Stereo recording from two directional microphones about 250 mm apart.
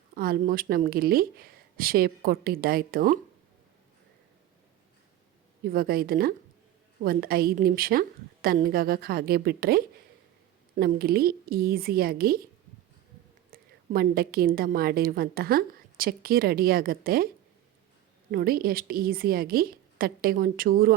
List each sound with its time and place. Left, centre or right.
0.1 s a woman's voice: right
5.6 s a woman's voice: right
13.5 s a woman's voice: right
18.3 s a woman's voice: right